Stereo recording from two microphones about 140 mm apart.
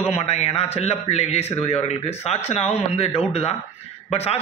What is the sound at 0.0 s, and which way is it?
A man's voice, 50° left (ahead or behind).